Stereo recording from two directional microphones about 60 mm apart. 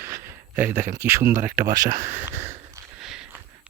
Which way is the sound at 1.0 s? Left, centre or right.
Right.